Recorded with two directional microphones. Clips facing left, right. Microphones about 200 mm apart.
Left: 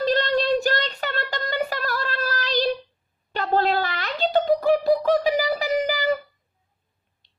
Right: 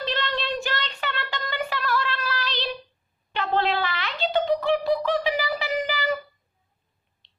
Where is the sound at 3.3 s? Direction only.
40° left (ahead or behind).